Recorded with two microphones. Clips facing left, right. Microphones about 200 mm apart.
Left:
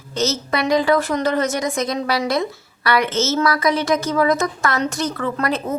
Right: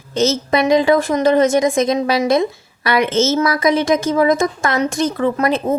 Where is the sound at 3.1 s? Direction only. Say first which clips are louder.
Right 5 dB; 50° right (ahead or behind).